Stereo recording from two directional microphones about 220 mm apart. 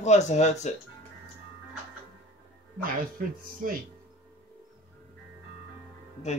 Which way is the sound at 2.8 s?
40° right (ahead or behind).